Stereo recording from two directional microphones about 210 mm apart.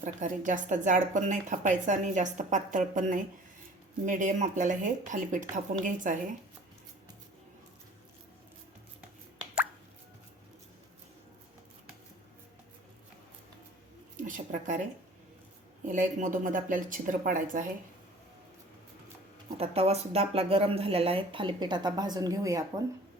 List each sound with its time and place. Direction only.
0.0 s a woman's voice: 35° right (ahead or behind)
14.2 s a sound: 40° right (ahead or behind)
15.9 s a woman's voice: 40° right (ahead or behind)
19.5 s speech: 30° right (ahead or behind)